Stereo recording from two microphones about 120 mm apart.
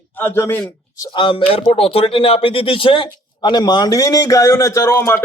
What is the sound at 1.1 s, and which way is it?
A man's voice, 45° left (ahead or behind).